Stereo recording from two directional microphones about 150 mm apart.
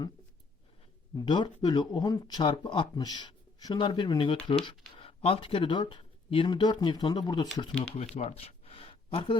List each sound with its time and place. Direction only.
1.1 s speech: 30° left (ahead or behind)
7.9 s speech: 45° left (ahead or behind)